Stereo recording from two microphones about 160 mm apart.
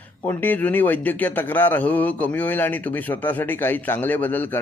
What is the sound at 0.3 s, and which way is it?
A man's voice, 10° left (ahead or behind).